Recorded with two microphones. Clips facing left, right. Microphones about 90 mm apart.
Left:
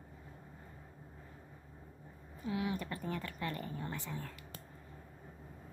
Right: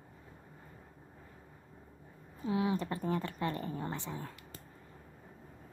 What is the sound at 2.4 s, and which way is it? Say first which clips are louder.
Speech: right 5 dB; 25° right (ahead or behind).